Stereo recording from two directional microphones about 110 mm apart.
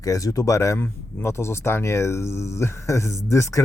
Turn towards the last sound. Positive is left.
turn(degrees=25)  # may be behind; listen again after turning